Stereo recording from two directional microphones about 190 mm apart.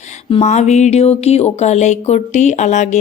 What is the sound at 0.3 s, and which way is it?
Speech, 30° left (ahead or behind).